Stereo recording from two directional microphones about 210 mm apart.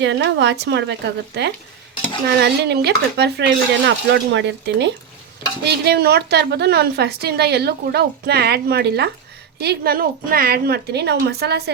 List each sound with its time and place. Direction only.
0.0 s a woman's voice: 55° right (ahead or behind)